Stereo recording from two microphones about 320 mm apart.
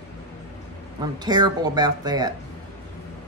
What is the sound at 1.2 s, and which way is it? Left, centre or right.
A woman's voice, centre.